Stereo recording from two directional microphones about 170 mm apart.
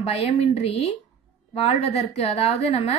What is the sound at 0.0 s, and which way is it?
A woman's voice, 35° left (ahead or behind).